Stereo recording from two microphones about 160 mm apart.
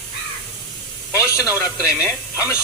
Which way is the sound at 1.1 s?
20° left (ahead or behind).